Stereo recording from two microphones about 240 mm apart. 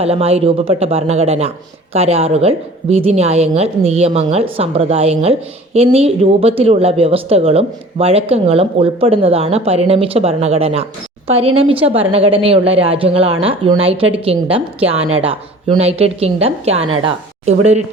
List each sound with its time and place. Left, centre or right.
0.0 s a man's voice: right